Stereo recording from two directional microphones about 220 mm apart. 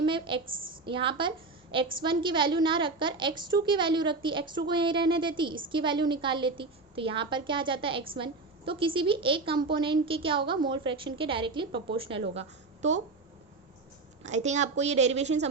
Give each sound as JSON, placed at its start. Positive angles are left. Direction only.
{"t": 0.0, "sound": "a woman's voice", "side_deg": -20}
{"t": 14.3, "sound": "a woman's voice", "side_deg": -30}